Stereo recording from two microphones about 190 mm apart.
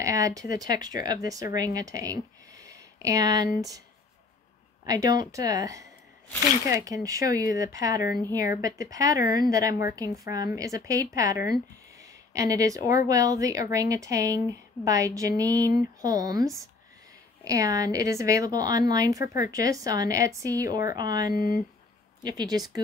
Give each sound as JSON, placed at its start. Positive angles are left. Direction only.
{"t": 0.0, "sound": "speech", "side_deg": -15}
{"t": 4.8, "sound": "speech", "side_deg": -20}
{"t": 9.2, "sound": "a woman's voice", "side_deg": 50}
{"t": 9.5, "sound": "speech", "side_deg": -15}
{"t": 11.3, "sound": "a woman's voice", "side_deg": 55}
{"t": 12.0, "sound": "speech", "side_deg": -15}
{"t": 17.5, "sound": "speech", "side_deg": -15}
{"t": 21.4, "sound": "a woman's voice", "side_deg": 50}
{"t": 22.2, "sound": "speech", "side_deg": -20}